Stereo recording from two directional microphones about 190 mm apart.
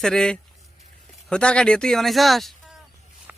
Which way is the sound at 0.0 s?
5° left (ahead or behind).